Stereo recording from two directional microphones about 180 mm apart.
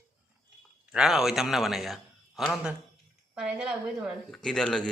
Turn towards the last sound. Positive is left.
turn(degrees=5)  # may be behind; listen again after turning